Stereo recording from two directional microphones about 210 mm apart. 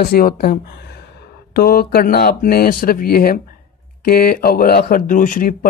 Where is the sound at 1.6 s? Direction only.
45° left (ahead or behind).